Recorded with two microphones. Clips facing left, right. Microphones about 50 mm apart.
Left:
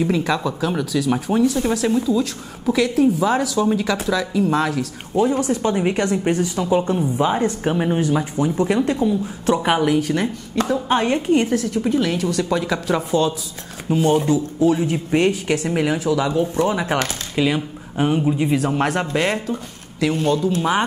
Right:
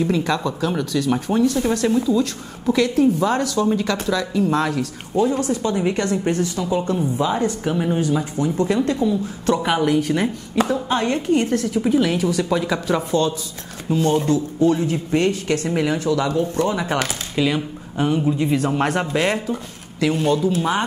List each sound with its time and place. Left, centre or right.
0.0 s speech: centre
5.5 s speech: left
5.9 s speech: centre
7.2 s speech: left
8.5 s speech: centre
9.8 s speech: centre
10.9 s speech: centre
11.5 s speech: centre
14.9 s speech: centre
18.6 s speech: centre